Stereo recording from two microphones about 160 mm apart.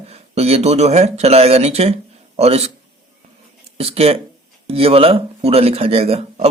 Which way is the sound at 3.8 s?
40° right (ahead or behind).